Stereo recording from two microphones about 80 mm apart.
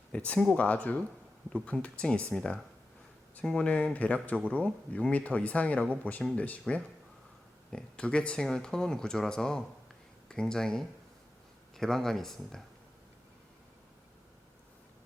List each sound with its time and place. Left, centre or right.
0.1 s speech: centre